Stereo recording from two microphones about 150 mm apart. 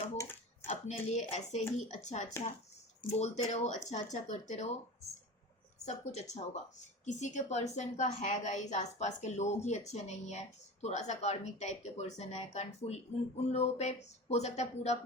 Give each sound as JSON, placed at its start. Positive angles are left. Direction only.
{"t": 0.2, "sound": "a sound", "side_deg": 15}
{"t": 0.7, "sound": "a woman's voice", "side_deg": 45}
{"t": 5.8, "sound": "a woman's voice", "side_deg": 50}